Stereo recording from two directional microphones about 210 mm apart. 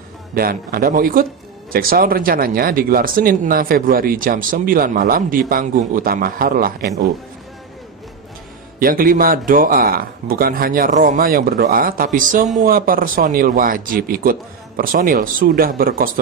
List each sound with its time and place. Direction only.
0.3 s speech: 45° right (ahead or behind)
8.7 s speech: 40° right (ahead or behind)